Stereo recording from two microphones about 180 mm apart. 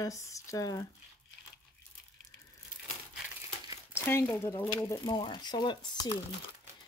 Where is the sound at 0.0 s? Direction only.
15° left (ahead or behind).